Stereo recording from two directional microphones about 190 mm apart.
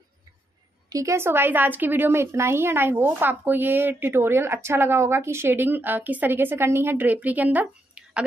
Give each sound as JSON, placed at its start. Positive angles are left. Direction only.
{"t": 0.8, "sound": "speech", "side_deg": -15}